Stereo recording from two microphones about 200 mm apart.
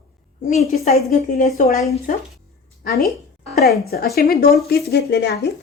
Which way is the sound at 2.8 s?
50° left (ahead or behind).